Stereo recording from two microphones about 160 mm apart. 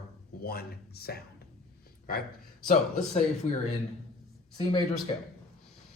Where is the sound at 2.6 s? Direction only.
50° left (ahead or behind).